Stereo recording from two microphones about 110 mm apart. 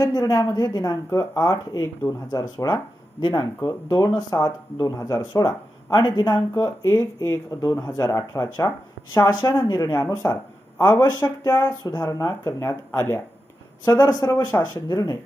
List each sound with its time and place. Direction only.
0.0 s speech: 35° left (ahead or behind)
3.2 s speech: 50° left (ahead or behind)
3.6 s speech: 35° left (ahead or behind)
13.8 s speech: 40° left (ahead or behind)